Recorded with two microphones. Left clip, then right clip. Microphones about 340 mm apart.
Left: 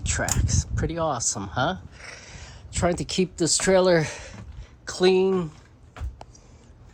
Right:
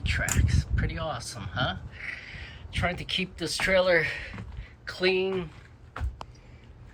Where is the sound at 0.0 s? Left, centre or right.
Centre.